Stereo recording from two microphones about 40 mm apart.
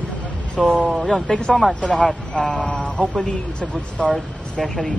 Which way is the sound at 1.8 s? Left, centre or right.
Left.